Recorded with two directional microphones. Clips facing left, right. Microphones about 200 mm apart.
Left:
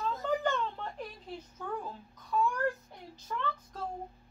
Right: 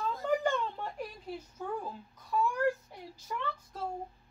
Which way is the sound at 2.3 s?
10° right (ahead or behind).